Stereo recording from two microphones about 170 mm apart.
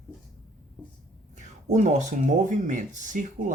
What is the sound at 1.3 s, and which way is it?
Speech, 45° right (ahead or behind).